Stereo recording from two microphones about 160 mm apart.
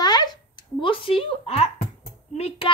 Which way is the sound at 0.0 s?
25° left (ahead or behind).